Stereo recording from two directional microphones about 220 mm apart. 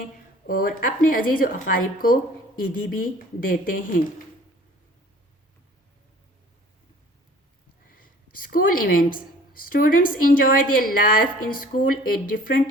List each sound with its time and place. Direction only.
0.4 s a woman's voice: 40° left (ahead or behind)
8.4 s a woman's voice: 40° left (ahead or behind)